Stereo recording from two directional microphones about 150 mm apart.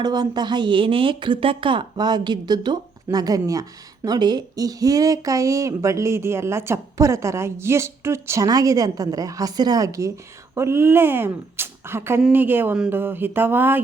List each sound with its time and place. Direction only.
0.0 s a woman's voice: 30° right (ahead or behind)